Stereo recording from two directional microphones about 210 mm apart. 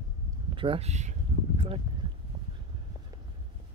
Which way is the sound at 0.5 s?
25° right (ahead or behind).